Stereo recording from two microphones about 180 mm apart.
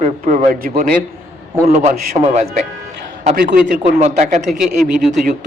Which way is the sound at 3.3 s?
65° right (ahead or behind).